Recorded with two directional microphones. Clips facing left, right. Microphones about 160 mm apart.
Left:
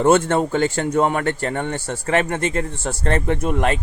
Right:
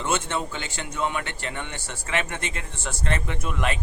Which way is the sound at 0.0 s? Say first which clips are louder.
Left 11 dB; 45° left (ahead or behind).